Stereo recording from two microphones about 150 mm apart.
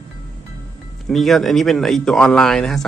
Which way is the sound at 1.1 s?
Centre (ahead or behind).